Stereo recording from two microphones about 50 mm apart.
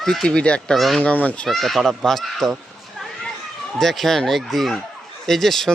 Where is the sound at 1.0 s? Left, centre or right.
Left.